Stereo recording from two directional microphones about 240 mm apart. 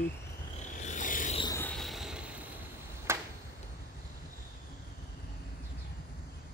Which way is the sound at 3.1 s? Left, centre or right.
Centre.